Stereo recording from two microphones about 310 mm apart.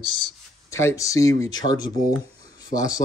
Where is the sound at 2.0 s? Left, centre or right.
Left.